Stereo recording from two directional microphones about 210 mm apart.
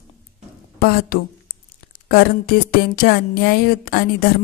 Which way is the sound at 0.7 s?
45° left (ahead or behind).